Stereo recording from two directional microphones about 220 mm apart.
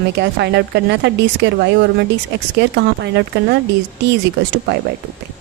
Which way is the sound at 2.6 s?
50° right (ahead or behind).